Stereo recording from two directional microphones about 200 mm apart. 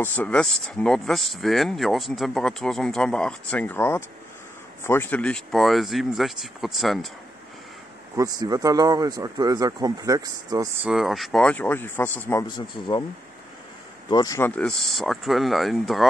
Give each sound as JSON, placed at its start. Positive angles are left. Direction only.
{"t": 0.0, "sound": "speech", "side_deg": 10}
{"t": 8.2, "sound": "speech", "side_deg": -20}
{"t": 10.8, "sound": "speech", "side_deg": 0}
{"t": 14.0, "sound": "speech", "side_deg": 20}